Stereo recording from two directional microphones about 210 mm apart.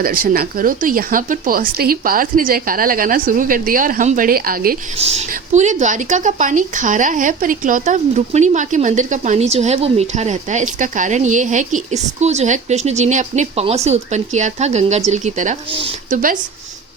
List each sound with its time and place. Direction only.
0.0 s speech: 45° right (ahead or behind)
4.9 s speech: 30° right (ahead or behind)